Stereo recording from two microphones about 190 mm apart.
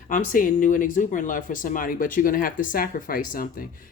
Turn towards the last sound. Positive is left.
turn(degrees=50)  # may be behind; listen again after turning